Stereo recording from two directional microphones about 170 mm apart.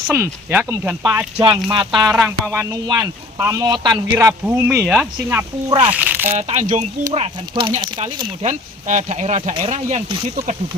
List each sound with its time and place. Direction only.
0.1 s speech: 15° right (ahead or behind)
1.7 s speech: 25° right (ahead or behind); by 6.3 s 10° right (ahead or behind)
6.3 s speech: 40° right (ahead or behind)
7.1 s speech: 30° right (ahead or behind)